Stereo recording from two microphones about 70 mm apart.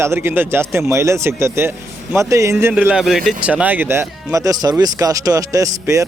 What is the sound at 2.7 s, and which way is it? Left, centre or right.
Speech, centre.